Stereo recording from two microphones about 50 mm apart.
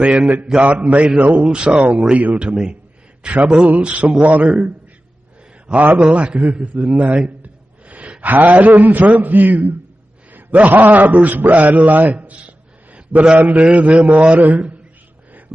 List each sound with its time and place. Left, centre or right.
0.0 s a man's voice: right
2.3 s a sound: centre
3.3 s a man's voice: right
5.7 s a man's voice: right